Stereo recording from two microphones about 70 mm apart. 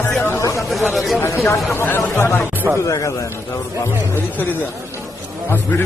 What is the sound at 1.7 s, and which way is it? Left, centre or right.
Speech, left.